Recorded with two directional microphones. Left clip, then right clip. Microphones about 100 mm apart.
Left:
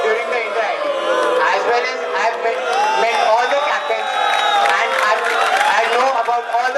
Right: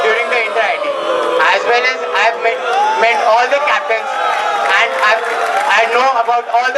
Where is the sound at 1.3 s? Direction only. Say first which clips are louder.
Right 4 dB; 20° right (ahead or behind).